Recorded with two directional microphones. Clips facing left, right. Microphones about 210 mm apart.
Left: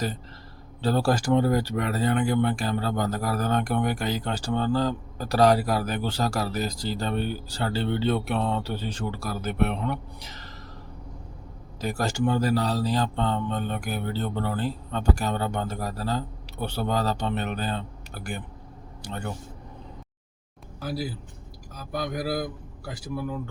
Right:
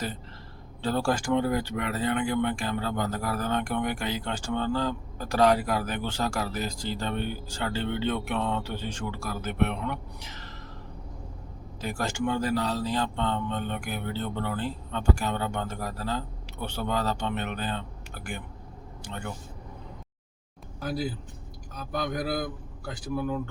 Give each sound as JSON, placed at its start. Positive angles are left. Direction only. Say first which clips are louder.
{"t": 0.8, "sound": "speech", "louder": "left 3 dB", "side_deg": 40}
{"t": 11.8, "sound": "speech", "louder": "left 3 dB", "side_deg": 40}
{"t": 20.8, "sound": "speech", "louder": "even", "side_deg": 5}